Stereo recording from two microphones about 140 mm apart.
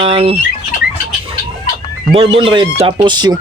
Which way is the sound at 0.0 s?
40° right (ahead or behind).